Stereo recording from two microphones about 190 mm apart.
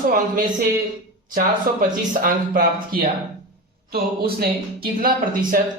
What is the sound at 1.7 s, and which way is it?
Speech, 50° right (ahead or behind).